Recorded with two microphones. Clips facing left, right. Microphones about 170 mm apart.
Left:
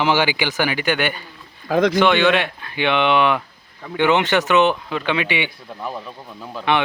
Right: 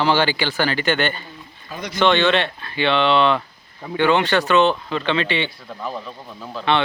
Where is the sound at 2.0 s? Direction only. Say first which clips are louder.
Left 1 dB; 15° left (ahead or behind).